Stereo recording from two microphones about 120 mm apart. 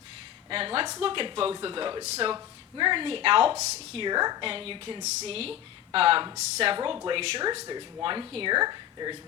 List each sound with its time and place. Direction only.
0.5 s speech: 50° right (ahead or behind)
2.0 s speech: 60° right (ahead or behind)
2.3 s speech: 40° right (ahead or behind)
3.6 s speech: 70° right (ahead or behind)
4.0 s a woman's voice: 35° right (ahead or behind)
4.4 s speech: 50° right (ahead or behind)
5.0 s speech: 60° right (ahead or behind)
6.7 s a woman's voice: 40° right (ahead or behind)